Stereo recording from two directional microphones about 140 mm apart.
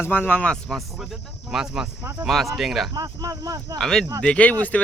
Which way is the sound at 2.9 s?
25° right (ahead or behind).